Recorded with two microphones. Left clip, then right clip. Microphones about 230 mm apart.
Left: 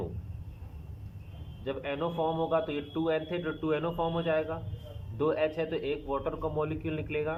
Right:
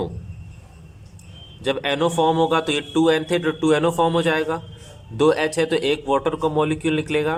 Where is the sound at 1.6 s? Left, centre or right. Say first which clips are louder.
Right 12 dB; right.